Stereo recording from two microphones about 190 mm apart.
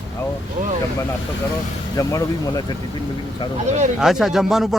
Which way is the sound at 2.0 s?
20° left (ahead or behind).